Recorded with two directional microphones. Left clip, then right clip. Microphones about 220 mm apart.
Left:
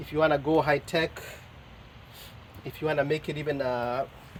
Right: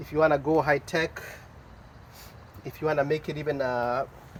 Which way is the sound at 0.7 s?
25° left (ahead or behind).